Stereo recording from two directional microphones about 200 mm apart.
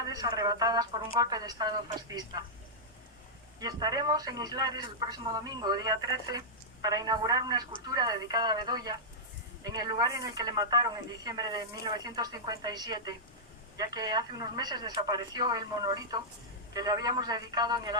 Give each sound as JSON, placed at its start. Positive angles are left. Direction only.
{"t": 0.1, "sound": "speech", "side_deg": -20}
{"t": 3.6, "sound": "speech", "side_deg": -20}